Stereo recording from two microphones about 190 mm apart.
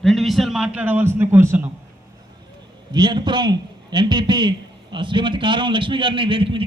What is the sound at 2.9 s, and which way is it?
A man's voice, 25° right (ahead or behind).